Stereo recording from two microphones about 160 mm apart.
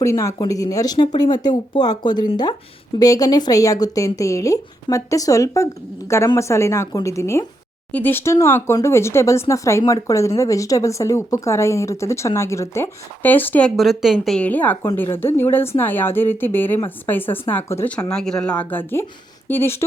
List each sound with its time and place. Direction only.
0.0 s speech: 20° left (ahead or behind)